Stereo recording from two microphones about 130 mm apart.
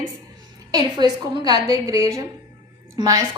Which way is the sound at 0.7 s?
35° right (ahead or behind).